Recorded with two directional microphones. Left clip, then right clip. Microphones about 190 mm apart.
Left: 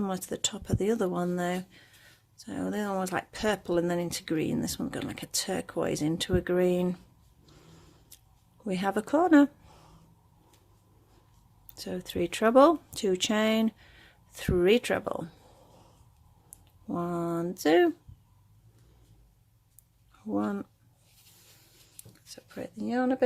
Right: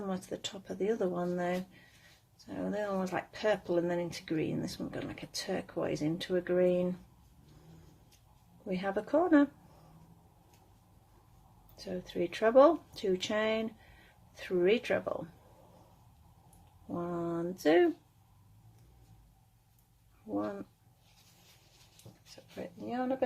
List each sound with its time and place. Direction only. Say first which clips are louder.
0.0 s speech: left 6 dB; 45° left (ahead or behind)
2.6 s speech: left 3 dB; 45° left (ahead or behind)
8.6 s speech: left 5 dB; 45° left (ahead or behind)
11.8 s speech: left 4 dB; 45° left (ahead or behind)
16.9 s a sound: left 5 dB; 40° left (ahead or behind)
20.3 s speech: left 4 dB; 45° left (ahead or behind)
22.6 s speech: left 6 dB; 45° left (ahead or behind)